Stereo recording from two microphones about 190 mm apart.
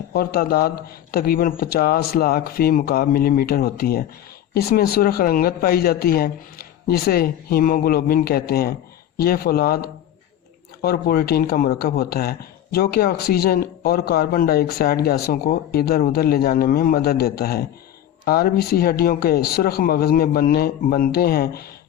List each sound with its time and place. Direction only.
0.1 s speech: 55° left (ahead or behind)